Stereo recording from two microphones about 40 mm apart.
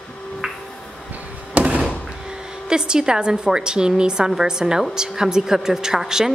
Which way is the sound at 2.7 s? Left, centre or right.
Centre.